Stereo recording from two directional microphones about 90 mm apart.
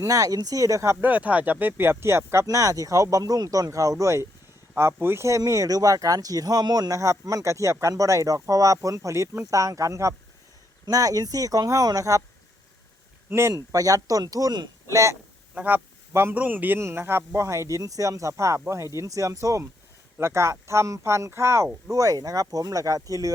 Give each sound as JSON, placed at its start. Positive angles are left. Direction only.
{"t": 0.0, "sound": "speech", "side_deg": -40}
{"t": 1.0, "sound": "speech", "side_deg": -15}
{"t": 5.4, "sound": "speech", "side_deg": -40}
{"t": 13.3, "sound": "speech", "side_deg": -25}
{"t": 13.7, "sound": "speech", "side_deg": -40}
{"t": 14.8, "sound": "speech", "side_deg": -35}
{"t": 15.5, "sound": "a man's voice", "side_deg": -20}